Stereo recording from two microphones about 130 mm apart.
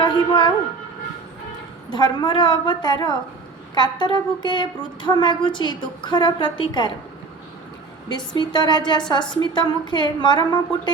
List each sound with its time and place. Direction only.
0.0 s music: 40° left (ahead or behind)
1.9 s speech: 35° left (ahead or behind)
8.1 s speech: 35° left (ahead or behind)